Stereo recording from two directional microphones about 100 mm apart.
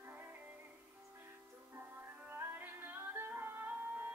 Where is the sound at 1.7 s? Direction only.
20° right (ahead or behind).